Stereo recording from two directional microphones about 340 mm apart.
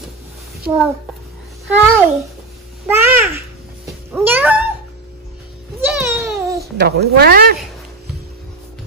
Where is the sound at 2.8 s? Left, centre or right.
Centre.